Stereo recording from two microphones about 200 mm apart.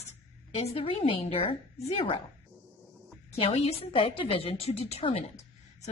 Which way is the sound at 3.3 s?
30° left (ahead or behind).